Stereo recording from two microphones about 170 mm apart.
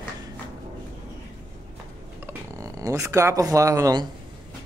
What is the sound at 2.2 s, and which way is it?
Speech, 20° right (ahead or behind).